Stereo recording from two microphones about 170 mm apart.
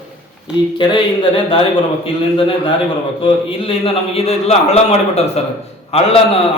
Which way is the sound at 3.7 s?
35° left (ahead or behind).